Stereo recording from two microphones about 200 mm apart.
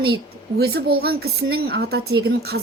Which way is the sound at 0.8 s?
50° right (ahead or behind).